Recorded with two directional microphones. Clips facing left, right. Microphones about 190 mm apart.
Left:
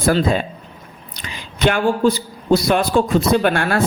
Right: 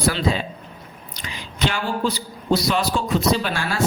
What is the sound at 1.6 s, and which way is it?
A man's voice, 55° left (ahead or behind).